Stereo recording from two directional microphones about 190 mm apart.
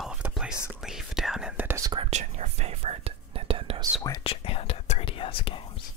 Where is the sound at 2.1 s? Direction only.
35° right (ahead or behind).